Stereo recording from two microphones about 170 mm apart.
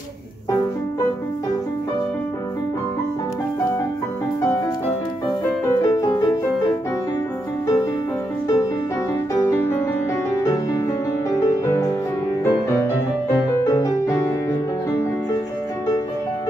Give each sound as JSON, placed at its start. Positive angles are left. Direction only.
{"t": 5.7, "sound": "music", "side_deg": 20}
{"t": 9.3, "sound": "music", "side_deg": 15}
{"t": 12.4, "sound": "music", "side_deg": 15}